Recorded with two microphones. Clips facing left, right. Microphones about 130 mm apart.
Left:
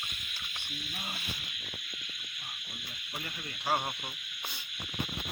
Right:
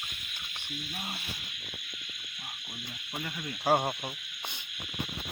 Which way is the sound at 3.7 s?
40° right (ahead or behind).